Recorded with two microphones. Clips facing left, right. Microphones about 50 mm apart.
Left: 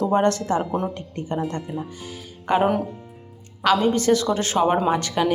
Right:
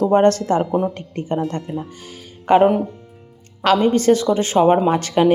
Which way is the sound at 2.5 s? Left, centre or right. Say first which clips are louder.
Right 7 dB; right.